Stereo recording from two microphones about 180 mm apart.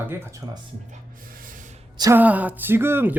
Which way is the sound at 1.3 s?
50° right (ahead or behind).